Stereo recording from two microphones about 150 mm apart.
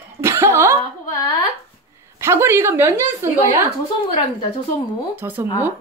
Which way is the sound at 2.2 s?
20° right (ahead or behind).